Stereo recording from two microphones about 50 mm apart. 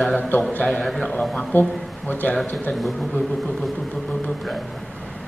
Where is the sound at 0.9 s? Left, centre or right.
Centre.